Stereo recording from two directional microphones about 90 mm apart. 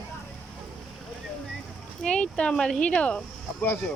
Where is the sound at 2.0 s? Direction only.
10° left (ahead or behind).